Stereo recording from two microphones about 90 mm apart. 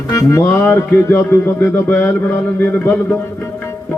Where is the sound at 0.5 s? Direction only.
30° left (ahead or behind).